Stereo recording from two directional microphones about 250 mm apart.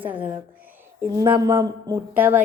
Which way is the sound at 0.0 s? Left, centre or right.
Centre.